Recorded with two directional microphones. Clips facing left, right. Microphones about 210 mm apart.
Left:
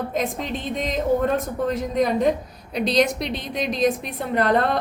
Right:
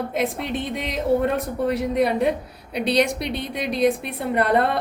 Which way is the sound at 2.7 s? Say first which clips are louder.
Even; 60° right (ahead or behind).